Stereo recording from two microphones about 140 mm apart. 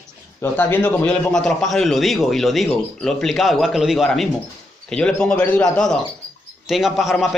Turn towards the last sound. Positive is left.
turn(degrees=0)  # may be behind; listen again after turning